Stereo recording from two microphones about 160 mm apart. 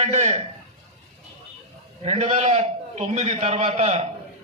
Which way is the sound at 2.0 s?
40° right (ahead or behind).